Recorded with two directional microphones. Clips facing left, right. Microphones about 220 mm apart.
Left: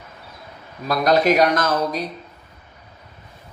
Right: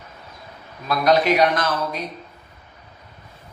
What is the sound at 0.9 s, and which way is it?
Speech, 40° left (ahead or behind).